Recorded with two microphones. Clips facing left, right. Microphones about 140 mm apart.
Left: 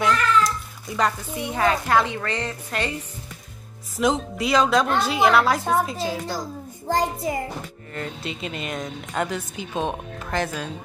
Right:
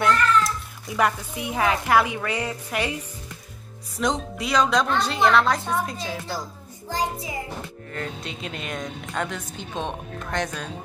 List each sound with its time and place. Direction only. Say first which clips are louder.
0.0 s speech: even; 5° right (ahead or behind)
4.0 s speech: left 3 dB; centre (ahead or behind)
6.9 s music: left 5 dB; 50° left (ahead or behind)
7.9 s speech: left 2 dB; 5° left (ahead or behind)